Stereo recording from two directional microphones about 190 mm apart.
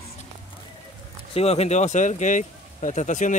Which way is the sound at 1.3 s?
35° left (ahead or behind).